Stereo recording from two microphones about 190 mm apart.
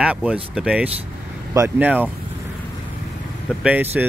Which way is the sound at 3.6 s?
10° right (ahead or behind).